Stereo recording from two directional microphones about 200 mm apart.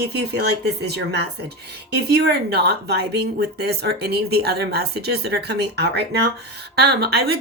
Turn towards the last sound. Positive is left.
turn(degrees=-55)  # may be behind; listen again after turning